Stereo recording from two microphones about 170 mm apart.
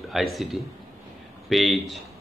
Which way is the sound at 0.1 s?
Centre (ahead or behind).